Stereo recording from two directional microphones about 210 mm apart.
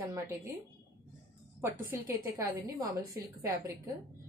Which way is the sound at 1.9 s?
15° right (ahead or behind).